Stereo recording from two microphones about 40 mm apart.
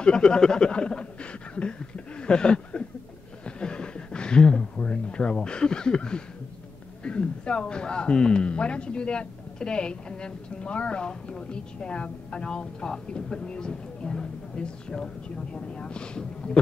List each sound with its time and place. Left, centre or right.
0.0 s speech: left